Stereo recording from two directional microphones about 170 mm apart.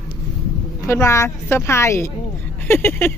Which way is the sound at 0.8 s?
15° left (ahead or behind).